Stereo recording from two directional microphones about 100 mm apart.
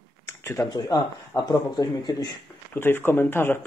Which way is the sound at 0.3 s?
30° left (ahead or behind).